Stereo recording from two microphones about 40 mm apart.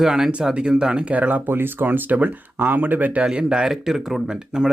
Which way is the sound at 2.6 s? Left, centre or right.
Right.